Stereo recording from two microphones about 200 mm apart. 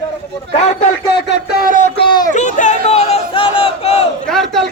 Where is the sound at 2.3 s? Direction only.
40° left (ahead or behind).